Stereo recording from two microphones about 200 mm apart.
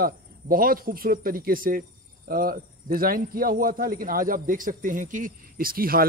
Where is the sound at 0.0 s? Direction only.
45° right (ahead or behind).